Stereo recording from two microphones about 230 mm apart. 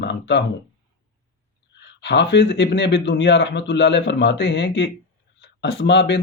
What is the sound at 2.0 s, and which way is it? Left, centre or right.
Speech, left.